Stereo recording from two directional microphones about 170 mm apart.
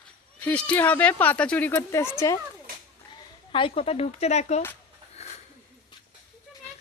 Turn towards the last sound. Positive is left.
turn(degrees=40)  # may be behind; listen again after turning